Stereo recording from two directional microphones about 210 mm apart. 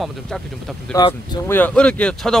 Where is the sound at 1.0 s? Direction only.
20° left (ahead or behind).